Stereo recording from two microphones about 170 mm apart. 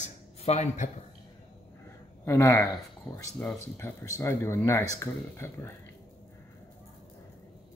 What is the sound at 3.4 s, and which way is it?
Speech, 10° left (ahead or behind).